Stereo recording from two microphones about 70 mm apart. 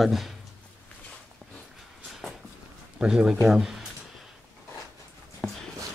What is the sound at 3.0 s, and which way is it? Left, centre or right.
Speech, centre.